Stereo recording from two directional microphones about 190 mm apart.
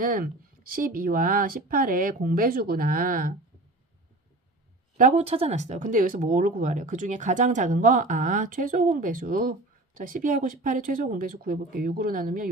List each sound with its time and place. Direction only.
0.0 s speech: 50° right (ahead or behind)
4.9 s speech: 40° right (ahead or behind)